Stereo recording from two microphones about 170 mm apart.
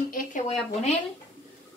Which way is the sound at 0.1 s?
55° left (ahead or behind).